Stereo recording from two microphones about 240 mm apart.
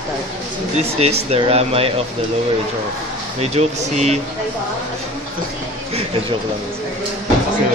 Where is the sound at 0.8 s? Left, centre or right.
Right.